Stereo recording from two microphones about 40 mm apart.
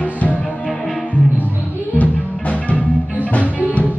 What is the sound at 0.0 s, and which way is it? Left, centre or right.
Music, left.